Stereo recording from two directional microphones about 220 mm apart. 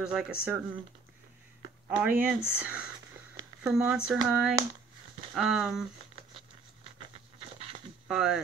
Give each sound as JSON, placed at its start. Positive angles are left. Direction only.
{"t": 0.0, "sound": "speech", "side_deg": -5}
{"t": 1.9, "sound": "speech", "side_deg": -5}
{"t": 7.3, "sound": "a sound", "side_deg": -25}
{"t": 8.1, "sound": "speech", "side_deg": 0}